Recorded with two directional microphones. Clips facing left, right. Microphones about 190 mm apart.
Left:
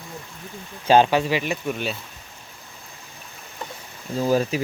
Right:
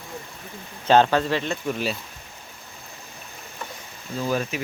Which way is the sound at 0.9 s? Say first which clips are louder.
Left 1 dB; 10° left (ahead or behind).